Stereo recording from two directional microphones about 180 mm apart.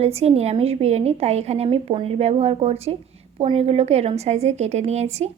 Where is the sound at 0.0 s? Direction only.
35° right (ahead or behind).